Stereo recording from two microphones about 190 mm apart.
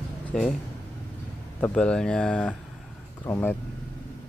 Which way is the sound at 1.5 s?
5° left (ahead or behind).